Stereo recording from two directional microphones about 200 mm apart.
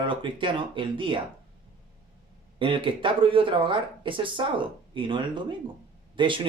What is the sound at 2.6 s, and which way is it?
Speech, 25° right (ahead or behind).